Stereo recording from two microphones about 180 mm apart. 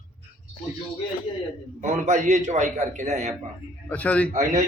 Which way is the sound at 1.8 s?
40° right (ahead or behind).